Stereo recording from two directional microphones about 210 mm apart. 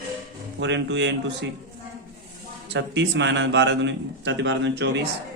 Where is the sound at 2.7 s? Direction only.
55° right (ahead or behind).